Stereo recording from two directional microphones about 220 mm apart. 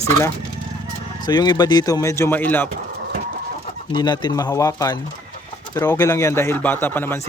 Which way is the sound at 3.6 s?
20° left (ahead or behind).